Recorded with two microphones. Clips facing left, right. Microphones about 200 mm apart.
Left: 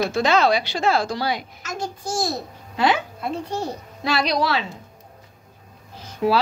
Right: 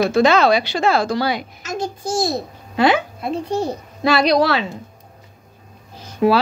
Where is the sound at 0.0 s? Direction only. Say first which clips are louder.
Right 5 dB; 65° right (ahead or behind).